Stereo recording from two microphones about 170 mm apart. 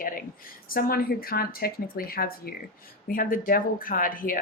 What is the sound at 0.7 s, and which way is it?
Speech, 60° left (ahead or behind).